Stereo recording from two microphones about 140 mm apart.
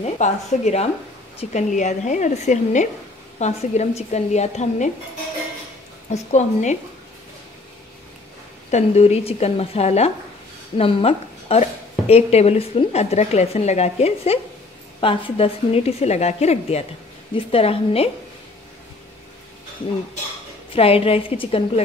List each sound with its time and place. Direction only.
0.0 s a woman's voice: 55° left (ahead or behind)
6.0 s a woman's voice: 55° left (ahead or behind)
8.6 s a woman's voice: 55° left (ahead or behind)
20.7 s a woman's voice: 40° left (ahead or behind)